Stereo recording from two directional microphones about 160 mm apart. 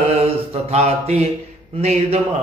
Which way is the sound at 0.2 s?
40° right (ahead or behind).